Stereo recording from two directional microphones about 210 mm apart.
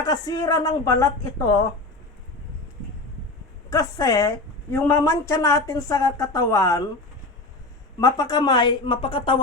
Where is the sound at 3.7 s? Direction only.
15° left (ahead or behind).